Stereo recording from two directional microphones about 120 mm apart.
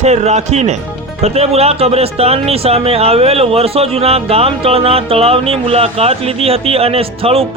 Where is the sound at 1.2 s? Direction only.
60° right (ahead or behind).